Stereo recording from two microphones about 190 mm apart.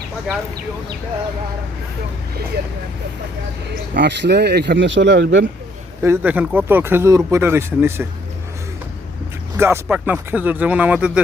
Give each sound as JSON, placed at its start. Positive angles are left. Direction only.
{"t": 3.9, "sound": "speech", "side_deg": -60}
{"t": 6.0, "sound": "speech", "side_deg": -10}
{"t": 9.6, "sound": "speech", "side_deg": -10}